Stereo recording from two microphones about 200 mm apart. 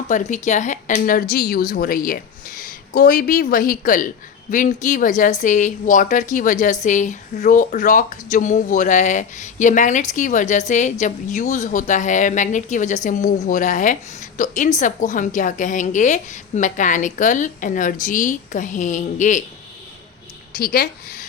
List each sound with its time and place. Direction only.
0.1 s a woman's voice: 35° left (ahead or behind)
20.5 s speech: 50° left (ahead or behind)